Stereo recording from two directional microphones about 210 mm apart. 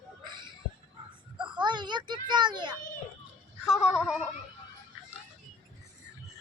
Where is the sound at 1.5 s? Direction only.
20° right (ahead or behind).